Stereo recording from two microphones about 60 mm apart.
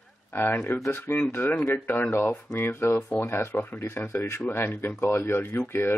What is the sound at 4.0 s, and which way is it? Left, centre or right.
A man's voice, left.